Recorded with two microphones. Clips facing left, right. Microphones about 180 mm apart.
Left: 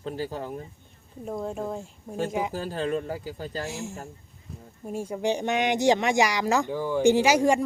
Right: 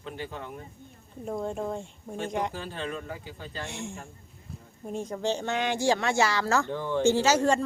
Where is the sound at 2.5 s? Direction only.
40° left (ahead or behind).